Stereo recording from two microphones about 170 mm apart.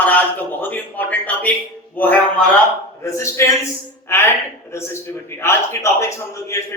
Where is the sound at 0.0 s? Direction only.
10° left (ahead or behind).